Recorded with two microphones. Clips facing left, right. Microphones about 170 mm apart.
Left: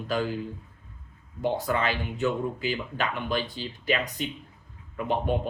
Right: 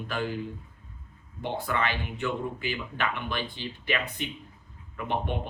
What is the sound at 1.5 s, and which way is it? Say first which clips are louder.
Speech: even; 40° left (ahead or behind).